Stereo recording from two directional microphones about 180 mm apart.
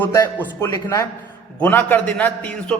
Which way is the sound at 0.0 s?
15° left (ahead or behind).